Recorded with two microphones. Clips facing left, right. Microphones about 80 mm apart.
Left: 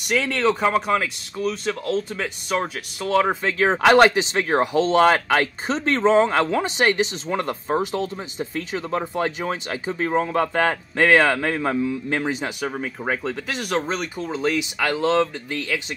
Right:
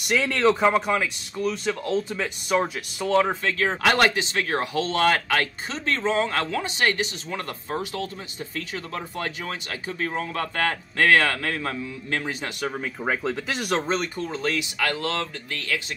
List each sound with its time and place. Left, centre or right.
0.0 s speech: centre
3.3 s speech: centre